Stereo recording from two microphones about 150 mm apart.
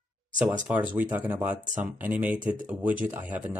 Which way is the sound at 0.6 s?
10° right (ahead or behind).